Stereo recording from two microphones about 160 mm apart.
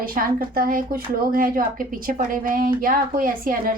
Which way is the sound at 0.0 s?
60° right (ahead or behind).